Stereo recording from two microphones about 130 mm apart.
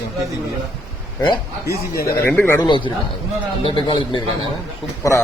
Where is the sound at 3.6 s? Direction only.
40° left (ahead or behind).